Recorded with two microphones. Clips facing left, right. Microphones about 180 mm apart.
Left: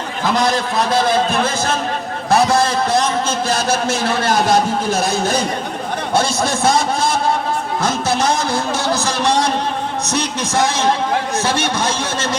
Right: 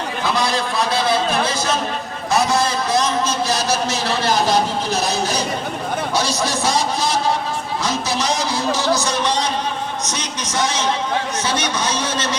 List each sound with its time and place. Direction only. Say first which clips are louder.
0.3 s a man's voice: left 4 dB; 45° left (ahead or behind)
2.3 s a man's voice: left 4 dB; 55° left (ahead or behind)
7.8 s music: left 4 dB; 55° left (ahead or behind)